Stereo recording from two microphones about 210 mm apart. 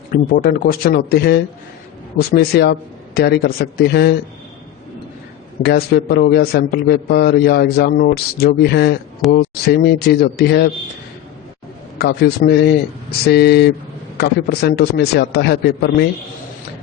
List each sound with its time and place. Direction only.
0.1 s a man's voice: 45° left (ahead or behind)
5.6 s a man's voice: 50° left (ahead or behind)
11.9 s a man's voice: 50° left (ahead or behind)